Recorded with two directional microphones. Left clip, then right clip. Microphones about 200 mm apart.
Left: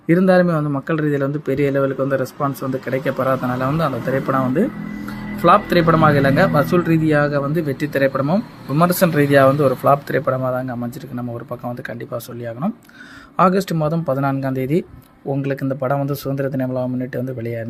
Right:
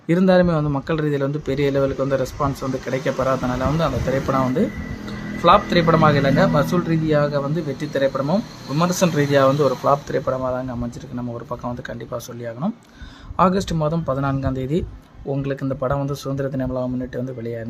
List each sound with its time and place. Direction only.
0.1 s a man's voice: 5° left (ahead or behind)